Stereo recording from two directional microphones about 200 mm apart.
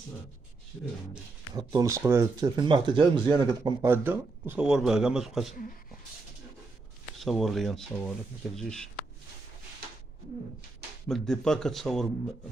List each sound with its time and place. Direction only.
1.5 s speech: 15° right (ahead or behind); by 5.5 s centre (ahead or behind)
7.2 s a man's voice: centre (ahead or behind)
11.1 s a man's voice: 5° left (ahead or behind)